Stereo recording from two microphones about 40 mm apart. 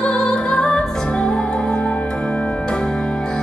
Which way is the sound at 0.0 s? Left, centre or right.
Left.